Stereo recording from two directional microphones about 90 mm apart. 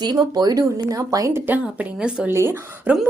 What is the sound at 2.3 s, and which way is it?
Speech, 25° right (ahead or behind).